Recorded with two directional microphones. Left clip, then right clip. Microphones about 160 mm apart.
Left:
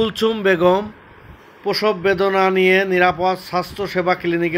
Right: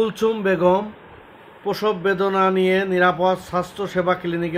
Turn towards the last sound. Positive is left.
turn(degrees=20)  # may be behind; listen again after turning